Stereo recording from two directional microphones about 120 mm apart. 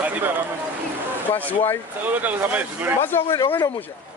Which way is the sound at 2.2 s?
15° right (ahead or behind).